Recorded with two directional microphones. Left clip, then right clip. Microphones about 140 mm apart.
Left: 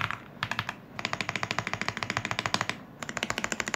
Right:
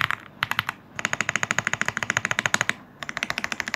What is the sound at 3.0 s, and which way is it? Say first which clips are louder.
Typing: right 4 dB; 30° left (ahead or behind).